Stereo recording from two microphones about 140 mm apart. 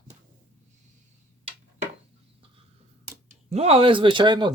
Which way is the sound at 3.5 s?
45° right (ahead or behind).